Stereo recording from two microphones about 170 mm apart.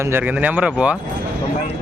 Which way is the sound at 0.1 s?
10° right (ahead or behind).